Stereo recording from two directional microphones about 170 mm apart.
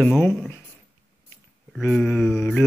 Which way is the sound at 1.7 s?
Centre (ahead or behind).